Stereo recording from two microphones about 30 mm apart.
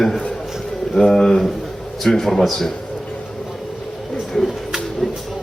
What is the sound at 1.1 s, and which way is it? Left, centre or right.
A man's voice, centre.